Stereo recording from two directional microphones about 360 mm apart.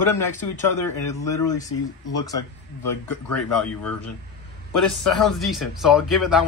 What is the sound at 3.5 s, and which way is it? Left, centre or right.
Speech, centre.